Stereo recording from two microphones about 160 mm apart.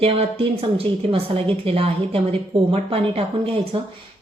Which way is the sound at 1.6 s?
35° right (ahead or behind).